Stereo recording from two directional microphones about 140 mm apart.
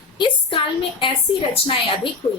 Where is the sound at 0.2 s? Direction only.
35° left (ahead or behind).